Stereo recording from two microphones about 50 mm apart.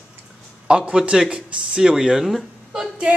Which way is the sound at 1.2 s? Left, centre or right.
Centre.